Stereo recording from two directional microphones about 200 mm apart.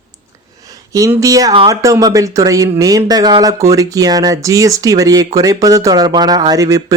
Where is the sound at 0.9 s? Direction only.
15° right (ahead or behind).